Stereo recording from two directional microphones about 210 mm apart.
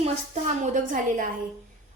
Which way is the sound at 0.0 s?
35° right (ahead or behind).